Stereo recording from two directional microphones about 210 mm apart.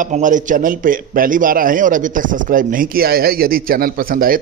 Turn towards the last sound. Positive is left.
turn(degrees=-45)  # may be behind; listen again after turning